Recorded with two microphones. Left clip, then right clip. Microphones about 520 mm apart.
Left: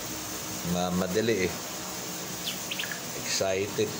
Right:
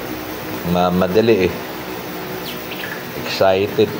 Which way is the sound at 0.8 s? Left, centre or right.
Left.